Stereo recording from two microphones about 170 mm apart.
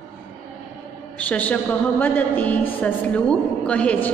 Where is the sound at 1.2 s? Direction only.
10° left (ahead or behind).